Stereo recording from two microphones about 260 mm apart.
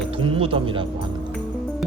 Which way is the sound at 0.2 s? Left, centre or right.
Right.